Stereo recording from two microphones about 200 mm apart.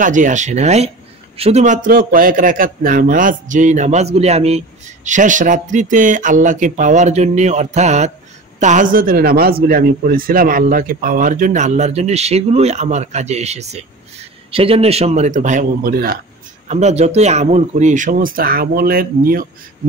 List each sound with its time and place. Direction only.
0.0 s speech: 40° right (ahead or behind)
16.6 s speech: 35° right (ahead or behind)